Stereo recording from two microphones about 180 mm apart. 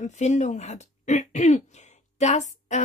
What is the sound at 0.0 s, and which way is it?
Speech, 40° left (ahead or behind).